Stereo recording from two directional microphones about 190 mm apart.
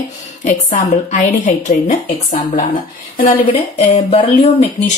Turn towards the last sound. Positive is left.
turn(degrees=35)  # may be behind; listen again after turning